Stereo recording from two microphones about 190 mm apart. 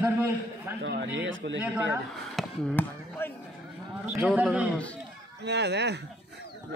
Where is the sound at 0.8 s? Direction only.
75° right (ahead or behind).